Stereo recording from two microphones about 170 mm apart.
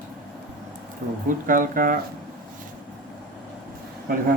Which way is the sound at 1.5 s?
50° right (ahead or behind).